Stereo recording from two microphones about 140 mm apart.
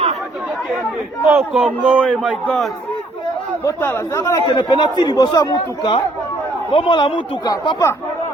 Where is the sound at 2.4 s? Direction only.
10° left (ahead or behind).